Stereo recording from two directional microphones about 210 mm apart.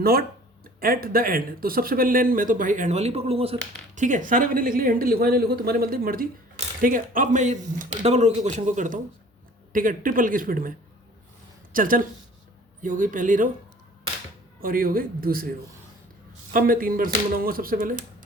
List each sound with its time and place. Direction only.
0.0 s a man's voice: 45° right (ahead or behind)
14.6 s speech: 45° right (ahead or behind)